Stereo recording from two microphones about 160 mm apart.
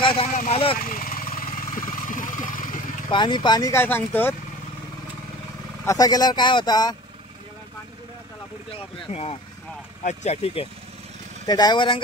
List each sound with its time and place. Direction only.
0.0 s speech: 35° left (ahead or behind)
0.8 s vehicle: 60° left (ahead or behind)
3.1 s speech: 30° left (ahead or behind); by 4.4 s 10° left (ahead or behind)
5.9 s speech: 25° left (ahead or behind)
8.6 s speech: 40° left (ahead or behind)
11.4 s speech: 25° left (ahead or behind)